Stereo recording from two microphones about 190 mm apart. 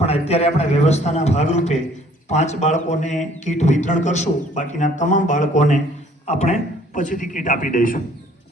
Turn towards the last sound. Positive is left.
turn(degrees=45)  # may be behind; listen again after turning